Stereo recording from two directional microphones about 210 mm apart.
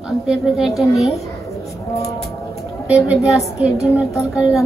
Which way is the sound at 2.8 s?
5° right (ahead or behind).